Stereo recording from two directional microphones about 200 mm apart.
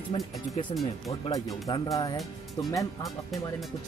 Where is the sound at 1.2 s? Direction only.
20° left (ahead or behind).